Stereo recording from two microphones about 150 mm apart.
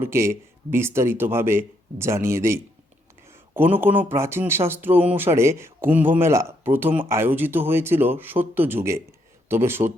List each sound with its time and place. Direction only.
0.0 s speech: 20° right (ahead or behind)